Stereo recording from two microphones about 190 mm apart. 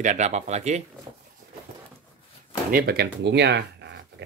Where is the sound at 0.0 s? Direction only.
40° right (ahead or behind).